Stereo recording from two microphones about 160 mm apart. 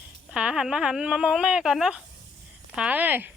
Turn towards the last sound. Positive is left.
turn(degrees=-10)  # may be behind; listen again after turning